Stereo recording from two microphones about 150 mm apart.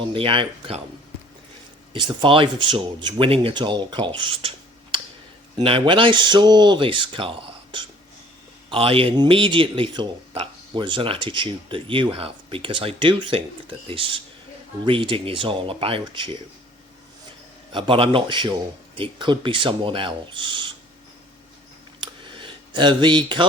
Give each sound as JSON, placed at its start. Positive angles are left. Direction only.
{"t": 0.1, "sound": "speech", "side_deg": -35}
{"t": 1.9, "sound": "speech", "side_deg": -30}
{"t": 17.7, "sound": "speech", "side_deg": -35}
{"t": 22.0, "sound": "a sound", "side_deg": -35}